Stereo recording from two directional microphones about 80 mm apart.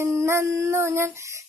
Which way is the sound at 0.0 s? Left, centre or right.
Right.